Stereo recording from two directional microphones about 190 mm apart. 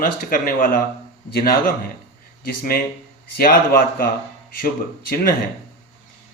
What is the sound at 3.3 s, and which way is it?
Speech, 50° left (ahead or behind).